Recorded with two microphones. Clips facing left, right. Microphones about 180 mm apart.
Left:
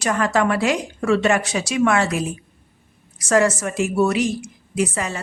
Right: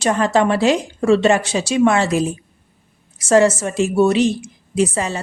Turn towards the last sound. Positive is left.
turn(degrees=-30)  # may be behind; listen again after turning